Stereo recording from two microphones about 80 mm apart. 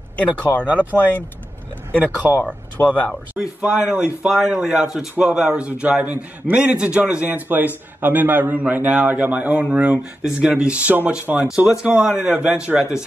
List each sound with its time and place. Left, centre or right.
0.4 s speech: centre
2.2 s speech: left
2.8 s speech: centre
3.3 s a man's voice: centre
4.3 s a man's voice: centre